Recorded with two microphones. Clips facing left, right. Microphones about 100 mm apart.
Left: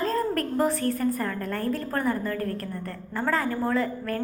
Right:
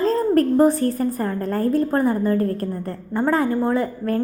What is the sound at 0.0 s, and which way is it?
A woman's voice, 25° right (ahead or behind).